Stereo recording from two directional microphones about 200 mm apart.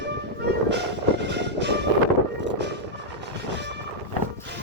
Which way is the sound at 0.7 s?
60° right (ahead or behind).